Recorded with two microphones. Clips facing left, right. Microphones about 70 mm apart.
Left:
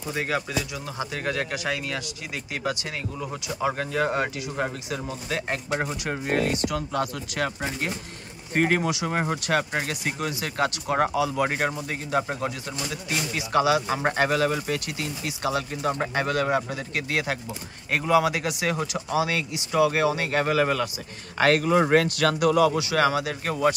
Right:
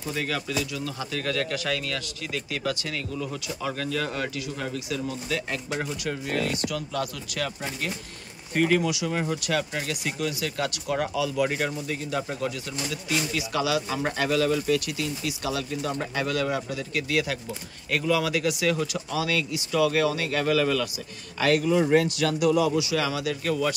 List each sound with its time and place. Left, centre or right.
0.1 s speech: left
21.4 s speech: left